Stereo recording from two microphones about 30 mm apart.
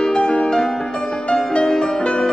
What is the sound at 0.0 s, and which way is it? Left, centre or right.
Music, left.